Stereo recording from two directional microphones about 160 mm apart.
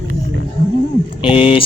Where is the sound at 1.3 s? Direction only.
35° left (ahead or behind).